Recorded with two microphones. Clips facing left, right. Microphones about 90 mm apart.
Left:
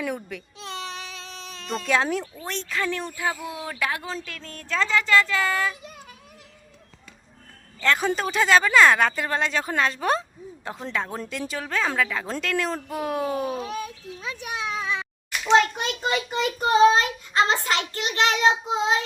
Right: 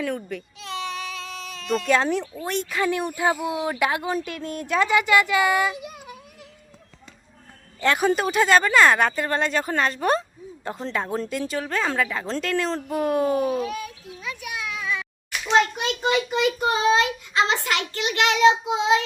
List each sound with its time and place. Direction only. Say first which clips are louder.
0.2 s speech: right 4 dB; centre (ahead or behind)
0.6 s a sound: right 4 dB; 30° left (ahead or behind)
1.8 s speech: right 1 dB; centre (ahead or behind)
2.4 s speech: right 4 dB; 10° right (ahead or behind)
7.8 s speech: right 2 dB; 15° right (ahead or behind)
13.6 s children playing: right 2 dB; 30° left (ahead or behind)
16.0 s a child's voice: right 4 dB; 35° left (ahead or behind)